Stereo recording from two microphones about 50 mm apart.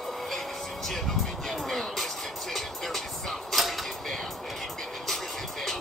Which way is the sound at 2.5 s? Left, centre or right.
Centre.